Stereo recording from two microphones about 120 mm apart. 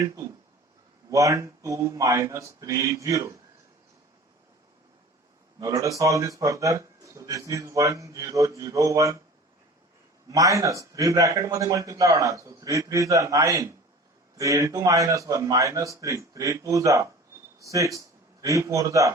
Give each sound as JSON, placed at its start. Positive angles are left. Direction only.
{"t": 1.1, "sound": "speech", "side_deg": -30}
{"t": 5.5, "sound": "speech", "side_deg": -25}
{"t": 10.2, "sound": "speech", "side_deg": -30}